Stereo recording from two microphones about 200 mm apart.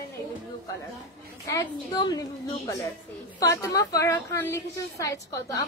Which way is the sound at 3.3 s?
15° left (ahead or behind).